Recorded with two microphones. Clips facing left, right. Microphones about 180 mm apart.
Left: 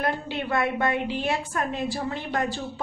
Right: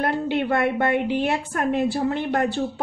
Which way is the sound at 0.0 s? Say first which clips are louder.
Right 5 dB; 60° right (ahead or behind).